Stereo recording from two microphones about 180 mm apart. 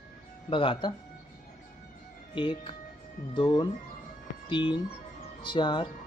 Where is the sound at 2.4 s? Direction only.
30° left (ahead or behind).